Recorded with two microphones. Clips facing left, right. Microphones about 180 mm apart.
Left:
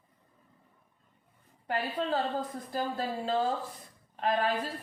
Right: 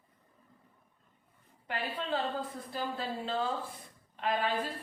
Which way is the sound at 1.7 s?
40° left (ahead or behind).